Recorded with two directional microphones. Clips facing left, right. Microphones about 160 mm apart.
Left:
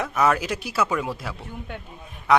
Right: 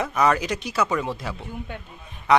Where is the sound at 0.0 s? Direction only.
Centre (ahead or behind).